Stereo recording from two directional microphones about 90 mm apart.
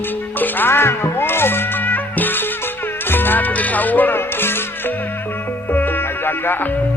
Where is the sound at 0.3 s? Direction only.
20° left (ahead or behind).